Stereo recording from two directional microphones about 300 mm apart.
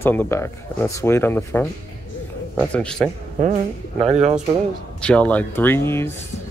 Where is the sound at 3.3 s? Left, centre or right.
Right.